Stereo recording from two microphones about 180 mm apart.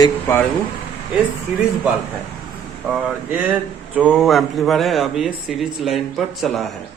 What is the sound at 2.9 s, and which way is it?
A man's voice, 5° right (ahead or behind).